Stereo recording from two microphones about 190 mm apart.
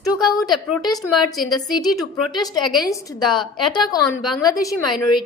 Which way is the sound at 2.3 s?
25° left (ahead or behind).